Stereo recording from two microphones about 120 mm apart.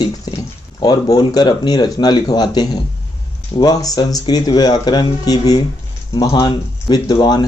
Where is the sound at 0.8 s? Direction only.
35° left (ahead or behind).